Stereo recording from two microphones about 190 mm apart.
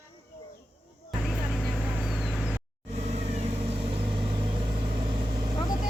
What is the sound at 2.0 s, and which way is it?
Vehicle, centre (ahead or behind).